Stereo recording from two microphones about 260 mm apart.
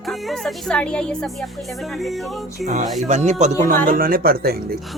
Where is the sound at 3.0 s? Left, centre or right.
Right.